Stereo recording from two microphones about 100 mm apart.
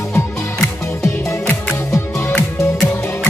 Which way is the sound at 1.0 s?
30° left (ahead or behind).